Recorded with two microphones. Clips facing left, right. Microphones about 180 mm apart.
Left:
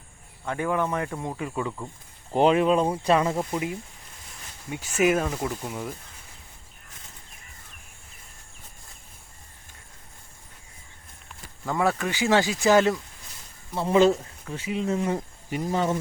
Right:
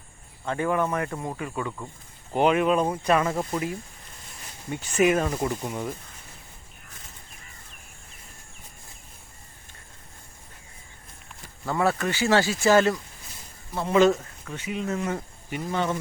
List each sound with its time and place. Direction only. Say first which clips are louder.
0.4 s speech: right 1 dB; 10° left (ahead or behind)
0.7 s speech: right 1 dB; 15° right (ahead or behind)
0.9 s speech: even; 5° left (ahead or behind)
1.4 s speech: left 1 dB; 10° left (ahead or behind)
2.3 s speech: left 1 dB; 30° left (ahead or behind)
3.3 s speech: even; 15° left (ahead or behind)
11.9 s speech: even; 10° left (ahead or behind)
13.7 s speech: even; 30° left (ahead or behind)